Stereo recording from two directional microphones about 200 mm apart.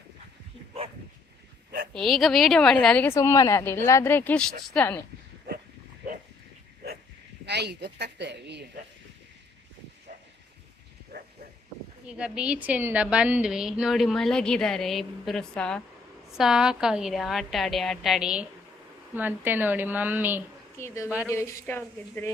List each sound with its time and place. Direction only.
1.9 s a woman's voice: centre (ahead or behind)
7.4 s speech: 60° right (ahead or behind)
11.1 s a sound: 55° right (ahead or behind)
12.0 s a woman's voice: 5° right (ahead or behind)
20.7 s a woman's voice: 15° left (ahead or behind)